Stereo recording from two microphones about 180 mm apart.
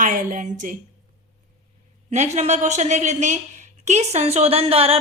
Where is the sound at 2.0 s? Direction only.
40° right (ahead or behind).